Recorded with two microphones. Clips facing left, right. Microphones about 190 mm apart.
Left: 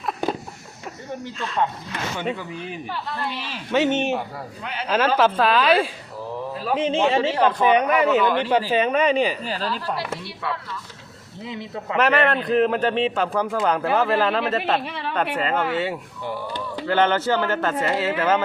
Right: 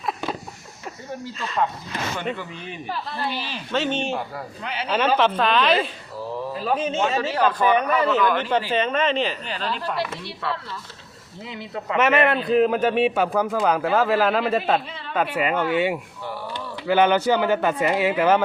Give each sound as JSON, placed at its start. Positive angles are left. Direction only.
{"t": 1.2, "sound": "a man's voice", "side_deg": 0}
{"t": 2.1, "sound": "speech", "side_deg": 10}
{"t": 3.2, "sound": "a man's voice", "side_deg": 0}
{"t": 3.7, "sound": "a man's voice", "side_deg": 20}
{"t": 4.6, "sound": "a man's voice", "side_deg": 5}
{"t": 6.5, "sound": "a sound", "side_deg": 0}
{"t": 6.7, "sound": "a man's voice", "side_deg": 30}
{"t": 9.5, "sound": "speech", "side_deg": 40}
{"t": 11.4, "sound": "a man's voice", "side_deg": 20}
{"t": 11.9, "sound": "a man's voice", "side_deg": 0}
{"t": 14.8, "sound": "a woman's voice", "side_deg": 70}
{"t": 15.4, "sound": "speech", "side_deg": -15}